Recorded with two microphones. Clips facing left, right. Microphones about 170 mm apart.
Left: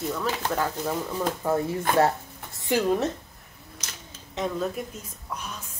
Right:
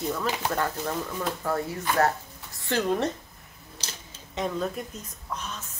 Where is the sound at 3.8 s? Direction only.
30° right (ahead or behind).